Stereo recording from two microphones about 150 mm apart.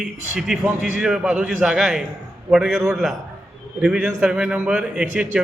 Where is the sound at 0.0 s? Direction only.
5° right (ahead or behind).